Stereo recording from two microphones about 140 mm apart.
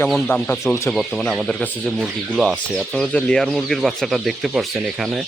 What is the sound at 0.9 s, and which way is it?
Speech, 5° left (ahead or behind).